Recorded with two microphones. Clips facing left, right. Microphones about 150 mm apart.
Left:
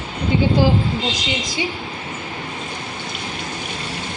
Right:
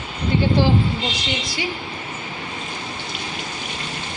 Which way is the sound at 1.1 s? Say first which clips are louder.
Left 2 dB; 45° left (ahead or behind).